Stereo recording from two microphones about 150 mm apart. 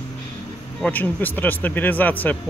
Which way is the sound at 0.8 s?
10° left (ahead or behind).